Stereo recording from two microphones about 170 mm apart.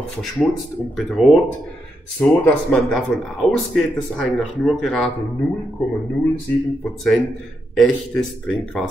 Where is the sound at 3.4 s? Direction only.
Centre (ahead or behind).